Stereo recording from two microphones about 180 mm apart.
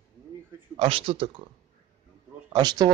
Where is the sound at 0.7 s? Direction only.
30° right (ahead or behind).